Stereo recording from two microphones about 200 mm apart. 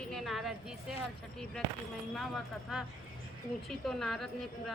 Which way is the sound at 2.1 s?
Centre (ahead or behind).